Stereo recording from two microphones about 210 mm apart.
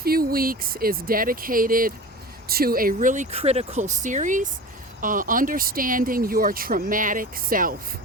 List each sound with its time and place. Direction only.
0.0 s speech: 45° right (ahead or behind)